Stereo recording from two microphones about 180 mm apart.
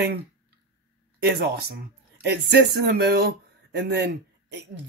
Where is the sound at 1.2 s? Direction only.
65° right (ahead or behind).